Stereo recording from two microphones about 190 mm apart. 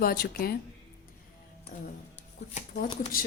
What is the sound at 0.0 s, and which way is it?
Speech, 50° left (ahead or behind).